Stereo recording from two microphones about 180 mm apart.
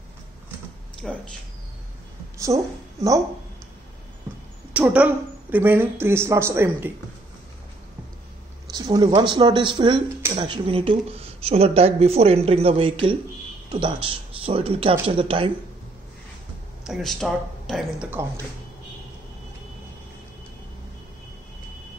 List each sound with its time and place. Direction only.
1.0 s speech: centre (ahead or behind)
2.4 s speech: 20° right (ahead or behind)
4.7 s a woman's voice: 10° right (ahead or behind)
8.6 s speech: 20° right (ahead or behind)
16.8 s speech: centre (ahead or behind)